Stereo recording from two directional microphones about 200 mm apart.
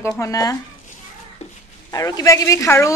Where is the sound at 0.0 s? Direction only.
15° left (ahead or behind).